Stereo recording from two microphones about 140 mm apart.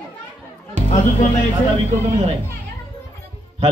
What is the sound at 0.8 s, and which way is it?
Music, 55° right (ahead or behind).